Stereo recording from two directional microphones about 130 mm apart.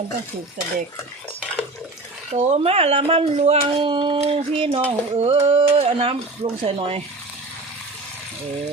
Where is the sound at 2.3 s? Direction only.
60° right (ahead or behind).